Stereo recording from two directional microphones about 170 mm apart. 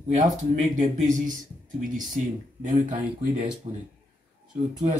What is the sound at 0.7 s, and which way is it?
Speech, 45° right (ahead or behind).